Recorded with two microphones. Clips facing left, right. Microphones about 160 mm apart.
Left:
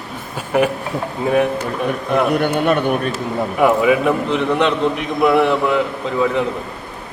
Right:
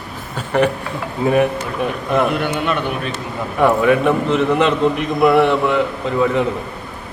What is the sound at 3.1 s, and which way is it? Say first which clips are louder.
A man's voice: left 3 dB; 5° left (ahead or behind).